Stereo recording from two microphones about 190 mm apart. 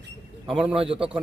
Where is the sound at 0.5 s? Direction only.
5° right (ahead or behind).